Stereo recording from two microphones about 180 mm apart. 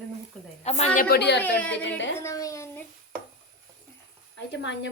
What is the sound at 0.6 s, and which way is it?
Speech, 35° left (ahead or behind).